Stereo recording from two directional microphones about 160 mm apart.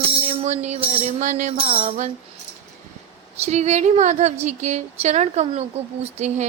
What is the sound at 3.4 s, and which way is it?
Music, 45° right (ahead or behind).